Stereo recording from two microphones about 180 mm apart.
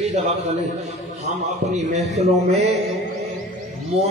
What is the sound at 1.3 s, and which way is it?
A man's voice, 40° right (ahead or behind).